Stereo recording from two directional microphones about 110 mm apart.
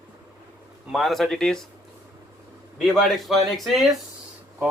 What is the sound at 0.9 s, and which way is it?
Speech, centre (ahead or behind).